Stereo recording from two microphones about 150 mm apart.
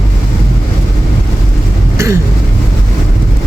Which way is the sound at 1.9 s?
20° right (ahead or behind).